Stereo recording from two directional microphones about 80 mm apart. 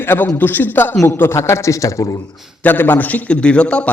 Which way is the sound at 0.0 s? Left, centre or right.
Left.